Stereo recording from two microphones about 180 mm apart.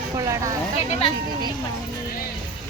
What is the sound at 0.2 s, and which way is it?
Speech, 20° right (ahead or behind).